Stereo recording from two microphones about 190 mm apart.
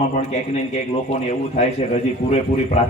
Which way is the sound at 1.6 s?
35° left (ahead or behind).